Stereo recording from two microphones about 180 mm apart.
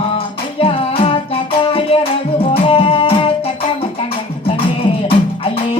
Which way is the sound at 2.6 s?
30° left (ahead or behind).